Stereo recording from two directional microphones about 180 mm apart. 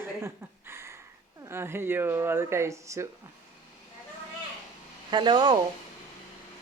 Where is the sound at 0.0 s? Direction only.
15° right (ahead or behind).